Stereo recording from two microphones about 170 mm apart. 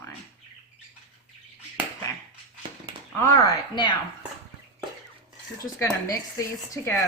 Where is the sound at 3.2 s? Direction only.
20° left (ahead or behind).